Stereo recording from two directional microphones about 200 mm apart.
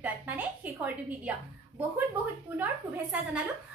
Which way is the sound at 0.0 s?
10° right (ahead or behind).